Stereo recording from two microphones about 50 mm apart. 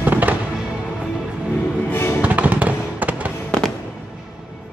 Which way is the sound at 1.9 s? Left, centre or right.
Left.